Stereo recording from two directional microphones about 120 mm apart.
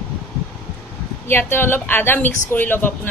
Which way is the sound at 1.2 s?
20° left (ahead or behind).